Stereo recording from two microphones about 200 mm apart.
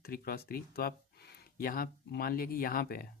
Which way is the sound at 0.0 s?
50° left (ahead or behind).